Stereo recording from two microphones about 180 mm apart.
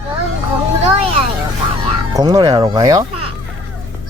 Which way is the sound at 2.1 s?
20° right (ahead or behind).